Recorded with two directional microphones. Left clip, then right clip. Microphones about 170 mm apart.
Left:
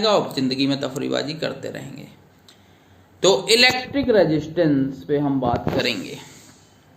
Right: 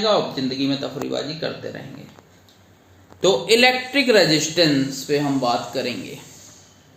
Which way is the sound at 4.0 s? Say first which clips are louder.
Right 2 dB; 10° right (ahead or behind).